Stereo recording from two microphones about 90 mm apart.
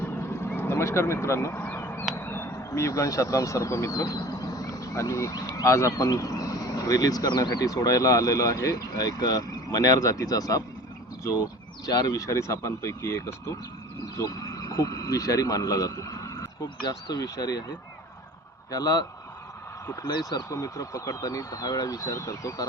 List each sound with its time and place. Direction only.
0.0 s vehicle: 25° left (ahead or behind)
1.6 s a sound: 25° left (ahead or behind); by 5.6 s 40° left (ahead or behind)
5.6 s speech: 30° left (ahead or behind)
11.9 s speech: 45° left (ahead or behind)
14.2 s a sound: 40° left (ahead or behind)
16.6 s speech: 50° left (ahead or behind)
18.7 s speech: 40° left (ahead or behind)
20.1 s speech: 55° left (ahead or behind)
20.5 s speech: 40° left (ahead or behind)